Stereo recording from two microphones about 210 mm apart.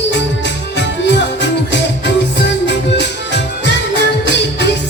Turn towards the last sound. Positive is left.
turn(degrees=55)  # may be behind; listen again after turning